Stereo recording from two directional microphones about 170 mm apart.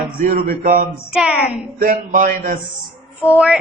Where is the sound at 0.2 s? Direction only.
55° right (ahead or behind).